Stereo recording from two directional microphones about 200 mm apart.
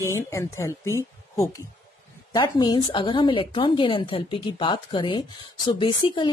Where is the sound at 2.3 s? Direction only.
20° left (ahead or behind).